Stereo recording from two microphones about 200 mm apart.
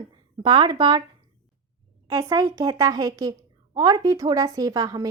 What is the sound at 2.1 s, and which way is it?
A woman's voice, 15° right (ahead or behind).